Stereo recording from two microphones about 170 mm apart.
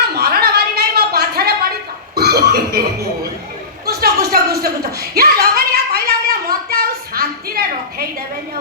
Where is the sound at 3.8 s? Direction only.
65° right (ahead or behind).